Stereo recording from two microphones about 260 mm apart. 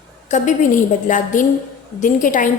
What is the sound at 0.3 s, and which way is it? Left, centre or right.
A woman's voice, left.